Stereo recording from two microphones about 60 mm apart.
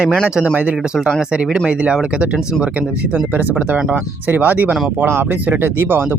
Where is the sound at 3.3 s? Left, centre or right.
Right.